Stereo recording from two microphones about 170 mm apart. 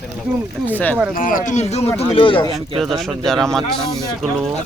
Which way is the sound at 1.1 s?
50° left (ahead or behind).